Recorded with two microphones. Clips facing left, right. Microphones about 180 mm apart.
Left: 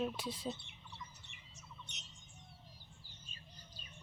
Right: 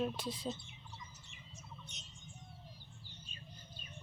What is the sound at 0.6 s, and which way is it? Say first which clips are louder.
Bird: even; 60° left (ahead or behind).